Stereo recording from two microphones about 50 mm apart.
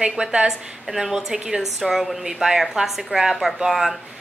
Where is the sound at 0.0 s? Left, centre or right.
Centre.